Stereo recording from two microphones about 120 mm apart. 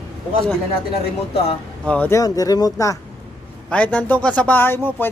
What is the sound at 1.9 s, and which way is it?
Speech, 15° left (ahead or behind).